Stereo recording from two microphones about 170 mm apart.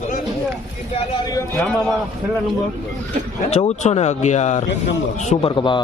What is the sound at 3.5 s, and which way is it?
Speech, 40° left (ahead or behind).